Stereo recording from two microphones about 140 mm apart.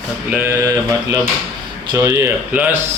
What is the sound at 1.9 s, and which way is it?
Speech, 20° right (ahead or behind).